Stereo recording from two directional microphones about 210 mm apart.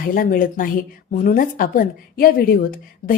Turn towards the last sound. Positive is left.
turn(degrees=40)  # may be behind; listen again after turning